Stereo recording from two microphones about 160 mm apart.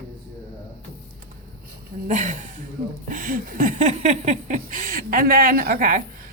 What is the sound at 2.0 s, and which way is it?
Speech, 50° right (ahead or behind).